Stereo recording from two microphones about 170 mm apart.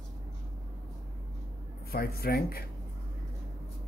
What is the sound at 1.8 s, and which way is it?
Speech, 65° left (ahead or behind).